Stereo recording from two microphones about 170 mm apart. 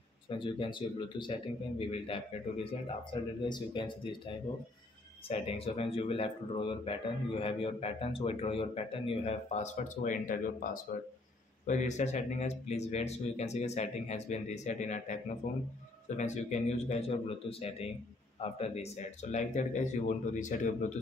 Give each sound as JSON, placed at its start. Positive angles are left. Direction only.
{"t": 0.3, "sound": "speech", "side_deg": 30}
{"t": 5.3, "sound": "speech", "side_deg": 35}